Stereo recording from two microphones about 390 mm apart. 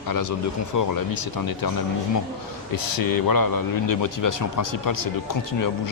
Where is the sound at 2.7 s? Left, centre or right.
Left.